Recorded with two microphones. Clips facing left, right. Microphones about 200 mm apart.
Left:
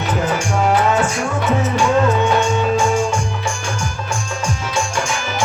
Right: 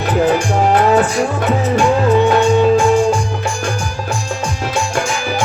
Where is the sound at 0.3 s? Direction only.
60° right (ahead or behind).